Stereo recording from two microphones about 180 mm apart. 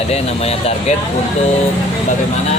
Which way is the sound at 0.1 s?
35° left (ahead or behind).